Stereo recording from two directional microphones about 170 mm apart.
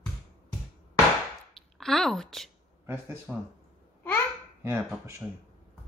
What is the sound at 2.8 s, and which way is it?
Speech, 15° right (ahead or behind).